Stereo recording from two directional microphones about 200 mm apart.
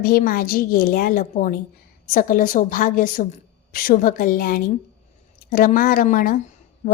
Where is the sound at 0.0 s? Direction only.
45° left (ahead or behind).